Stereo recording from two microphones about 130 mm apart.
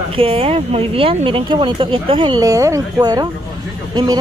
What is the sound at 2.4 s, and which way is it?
Speech, 25° right (ahead or behind).